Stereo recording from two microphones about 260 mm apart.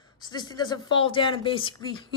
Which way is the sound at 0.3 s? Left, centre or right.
Centre.